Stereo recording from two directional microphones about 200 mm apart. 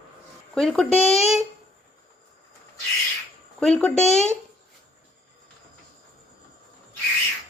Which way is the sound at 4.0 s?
35° left (ahead or behind).